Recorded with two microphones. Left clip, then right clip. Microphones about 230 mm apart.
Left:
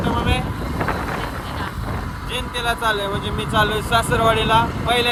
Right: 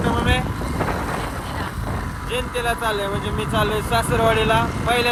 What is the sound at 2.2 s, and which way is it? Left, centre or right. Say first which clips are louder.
Speech: even; centre.